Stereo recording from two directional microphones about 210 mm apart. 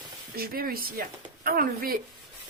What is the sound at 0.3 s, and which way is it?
Speech, 45° right (ahead or behind).